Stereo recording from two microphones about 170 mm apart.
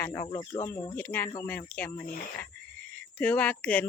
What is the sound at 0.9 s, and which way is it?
Speech, 10° left (ahead or behind).